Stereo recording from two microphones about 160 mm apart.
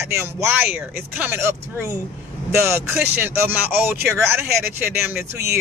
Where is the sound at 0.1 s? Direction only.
15° right (ahead or behind).